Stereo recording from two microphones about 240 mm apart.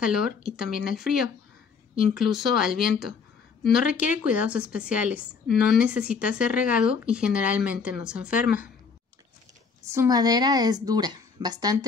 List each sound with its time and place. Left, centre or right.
0.0 s speech: centre
9.8 s a woman's voice: centre